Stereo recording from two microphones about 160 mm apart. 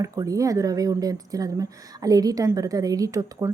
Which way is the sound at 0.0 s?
20° right (ahead or behind).